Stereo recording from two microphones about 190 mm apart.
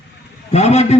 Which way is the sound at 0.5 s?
35° left (ahead or behind).